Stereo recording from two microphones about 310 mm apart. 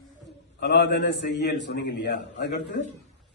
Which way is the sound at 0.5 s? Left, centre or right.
Left.